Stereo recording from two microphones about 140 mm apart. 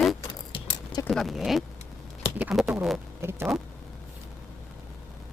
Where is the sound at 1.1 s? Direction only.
Centre (ahead or behind).